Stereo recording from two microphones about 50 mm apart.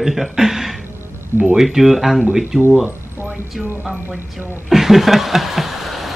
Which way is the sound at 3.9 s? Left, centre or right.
Right.